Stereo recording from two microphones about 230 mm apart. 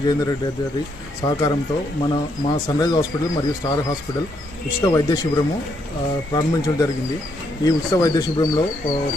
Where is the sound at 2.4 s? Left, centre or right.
Centre.